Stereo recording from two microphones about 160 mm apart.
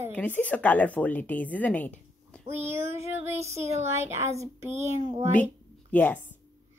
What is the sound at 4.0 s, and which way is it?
A woman's voice, 15° right (ahead or behind).